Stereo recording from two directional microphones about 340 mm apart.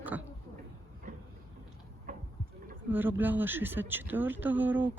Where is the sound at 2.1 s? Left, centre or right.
Right.